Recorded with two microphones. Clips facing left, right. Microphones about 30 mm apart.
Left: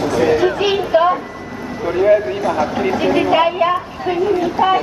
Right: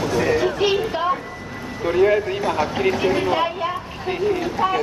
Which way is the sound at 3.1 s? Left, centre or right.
Left.